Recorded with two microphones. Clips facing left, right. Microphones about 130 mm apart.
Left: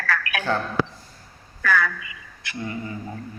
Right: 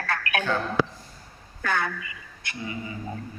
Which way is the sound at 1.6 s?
25° right (ahead or behind).